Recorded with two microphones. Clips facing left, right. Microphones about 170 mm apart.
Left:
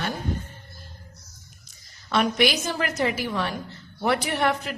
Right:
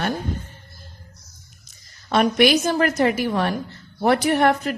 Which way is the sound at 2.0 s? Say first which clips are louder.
Right 5 dB; 50° right (ahead or behind).